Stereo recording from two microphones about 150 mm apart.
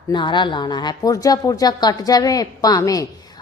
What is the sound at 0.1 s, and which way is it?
A woman's voice, 30° left (ahead or behind).